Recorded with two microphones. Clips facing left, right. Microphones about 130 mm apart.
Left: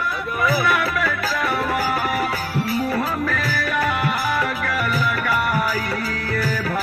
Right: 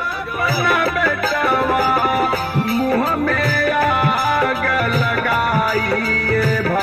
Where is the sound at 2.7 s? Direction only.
60° right (ahead or behind).